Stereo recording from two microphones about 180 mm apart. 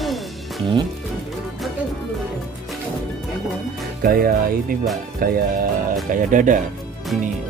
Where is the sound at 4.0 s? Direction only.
55° right (ahead or behind).